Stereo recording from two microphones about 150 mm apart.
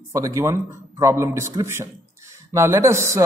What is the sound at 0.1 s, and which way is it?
A man's voice, 20° right (ahead or behind).